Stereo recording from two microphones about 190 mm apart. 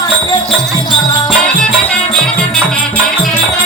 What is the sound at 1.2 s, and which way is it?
Music, 5° left (ahead or behind).